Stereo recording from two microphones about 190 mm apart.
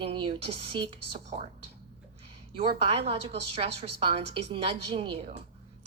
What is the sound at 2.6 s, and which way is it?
A woman's voice, 30° right (ahead or behind).